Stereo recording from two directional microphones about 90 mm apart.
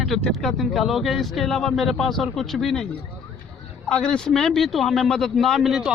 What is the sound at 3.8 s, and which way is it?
Speech, 10° left (ahead or behind).